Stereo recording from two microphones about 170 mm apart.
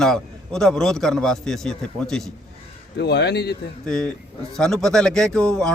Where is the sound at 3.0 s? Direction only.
80° left.